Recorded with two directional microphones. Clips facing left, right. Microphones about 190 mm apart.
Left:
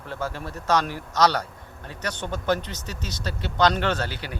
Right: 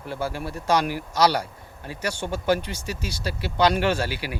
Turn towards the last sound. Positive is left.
turn(degrees=-10)  # may be behind; listen again after turning